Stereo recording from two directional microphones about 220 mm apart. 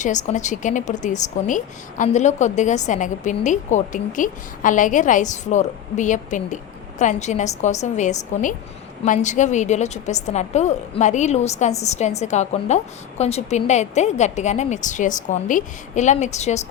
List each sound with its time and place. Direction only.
0.0 s a woman's voice: 35° left (ahead or behind)